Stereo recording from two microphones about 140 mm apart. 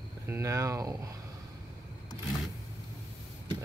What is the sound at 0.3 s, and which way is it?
Speech, 20° right (ahead or behind).